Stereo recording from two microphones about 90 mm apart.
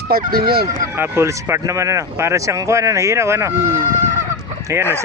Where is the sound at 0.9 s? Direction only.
25° right (ahead or behind).